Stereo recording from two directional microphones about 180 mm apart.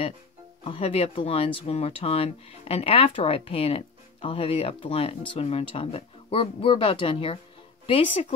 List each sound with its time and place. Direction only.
0.7 s speech: 30° left (ahead or behind)